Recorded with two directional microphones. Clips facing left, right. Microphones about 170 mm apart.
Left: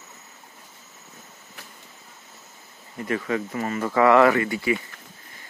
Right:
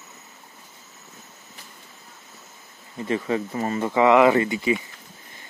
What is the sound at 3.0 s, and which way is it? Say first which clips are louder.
Speech: right 2 dB; 25° right (ahead or behind).